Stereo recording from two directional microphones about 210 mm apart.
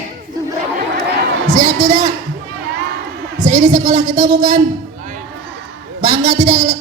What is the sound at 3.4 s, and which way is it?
A woman's voice, 35° right (ahead or behind).